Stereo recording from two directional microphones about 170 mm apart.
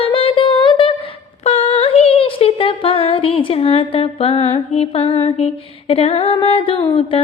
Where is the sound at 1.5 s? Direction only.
35° left (ahead or behind).